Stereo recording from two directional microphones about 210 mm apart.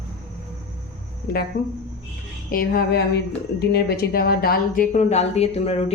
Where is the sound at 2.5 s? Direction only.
45° left (ahead or behind); by 5.7 s 30° left (ahead or behind).